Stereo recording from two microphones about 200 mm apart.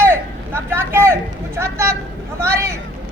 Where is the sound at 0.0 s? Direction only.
10° right (ahead or behind).